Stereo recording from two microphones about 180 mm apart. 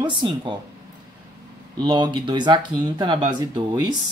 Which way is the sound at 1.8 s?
25° right (ahead or behind).